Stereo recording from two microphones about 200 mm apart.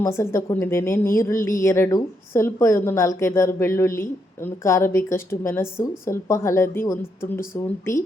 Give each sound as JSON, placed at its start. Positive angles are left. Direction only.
{"t": 0.0, "sound": "a woman's voice", "side_deg": 15}